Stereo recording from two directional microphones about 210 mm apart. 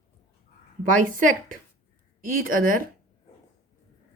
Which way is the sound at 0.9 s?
40° right (ahead or behind).